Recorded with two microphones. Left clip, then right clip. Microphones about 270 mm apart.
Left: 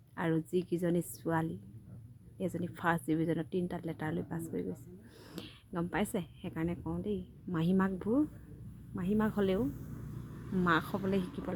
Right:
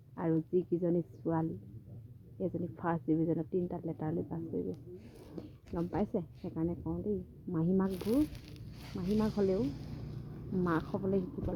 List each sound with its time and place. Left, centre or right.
0.2 s a woman's voice: centre